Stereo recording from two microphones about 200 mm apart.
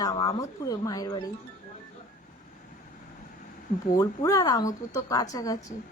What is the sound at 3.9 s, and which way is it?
Speech, 15° left (ahead or behind).